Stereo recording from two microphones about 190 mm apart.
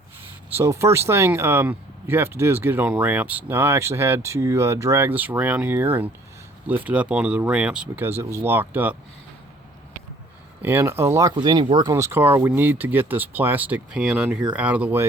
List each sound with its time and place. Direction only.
0.5 s speech: 15° right (ahead or behind)
10.6 s speech: 10° right (ahead or behind)